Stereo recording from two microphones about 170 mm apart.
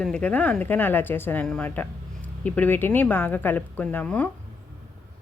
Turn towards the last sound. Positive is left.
turn(degrees=10)  # may be behind; listen again after turning